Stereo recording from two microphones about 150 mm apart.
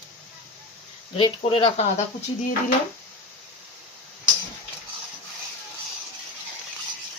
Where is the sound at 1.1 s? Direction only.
40° left (ahead or behind).